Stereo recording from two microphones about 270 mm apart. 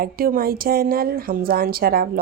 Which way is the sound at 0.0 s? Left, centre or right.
Right.